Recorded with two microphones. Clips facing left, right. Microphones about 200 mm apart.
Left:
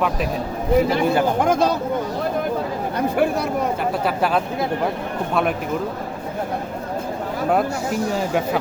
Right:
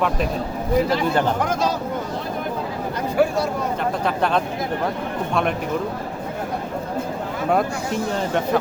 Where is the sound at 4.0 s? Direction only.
5° left (ahead or behind).